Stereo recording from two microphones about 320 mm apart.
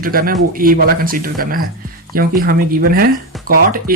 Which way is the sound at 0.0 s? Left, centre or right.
Right.